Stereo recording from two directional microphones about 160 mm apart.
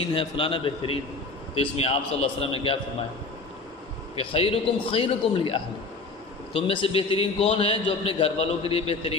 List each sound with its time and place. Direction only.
0.1 s a man's voice: 35° left (ahead or behind)
4.2 s a man's voice: 35° left (ahead or behind)